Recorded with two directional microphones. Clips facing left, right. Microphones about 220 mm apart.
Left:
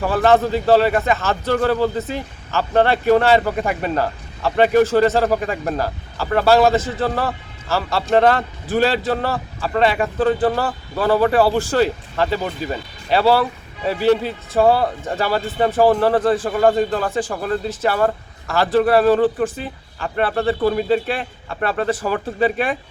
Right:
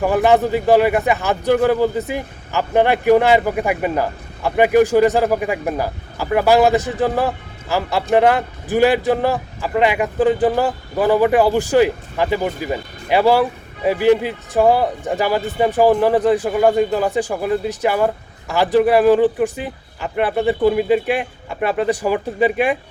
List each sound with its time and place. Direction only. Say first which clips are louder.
0.0 s a man's voice: right 1 dB; 15° right (ahead or behind)